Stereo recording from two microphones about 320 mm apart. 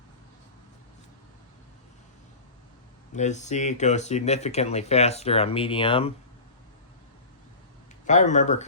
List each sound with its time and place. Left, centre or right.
3.2 s speech: left
8.0 s speech: left